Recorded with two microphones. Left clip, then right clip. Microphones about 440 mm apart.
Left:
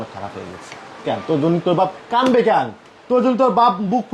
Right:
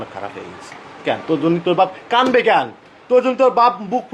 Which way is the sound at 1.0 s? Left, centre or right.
Centre.